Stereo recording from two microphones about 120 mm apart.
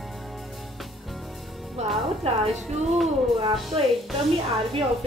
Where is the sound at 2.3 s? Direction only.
55° right (ahead or behind).